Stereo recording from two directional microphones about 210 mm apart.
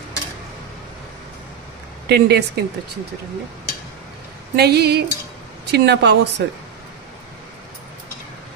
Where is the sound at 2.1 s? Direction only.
50° right (ahead or behind).